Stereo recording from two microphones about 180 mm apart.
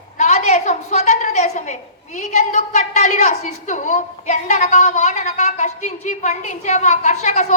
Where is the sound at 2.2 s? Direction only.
40° left (ahead or behind).